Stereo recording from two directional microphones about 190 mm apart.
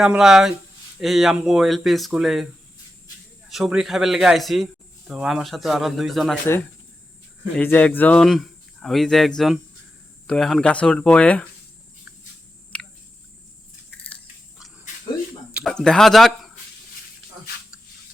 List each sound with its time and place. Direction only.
0.0 s speech: centre (ahead or behind)
3.5 s speech: 5° right (ahead or behind)
7.5 s speech: 10° left (ahead or behind)
12.7 s a sound: 5° left (ahead or behind)
15.5 s speech: 5° left (ahead or behind)